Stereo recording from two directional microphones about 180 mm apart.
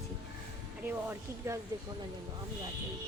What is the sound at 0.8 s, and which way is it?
Speech, 10° right (ahead or behind).